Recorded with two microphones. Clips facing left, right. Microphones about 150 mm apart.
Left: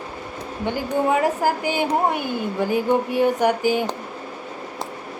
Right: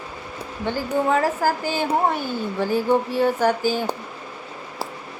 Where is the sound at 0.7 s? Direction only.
15° left (ahead or behind).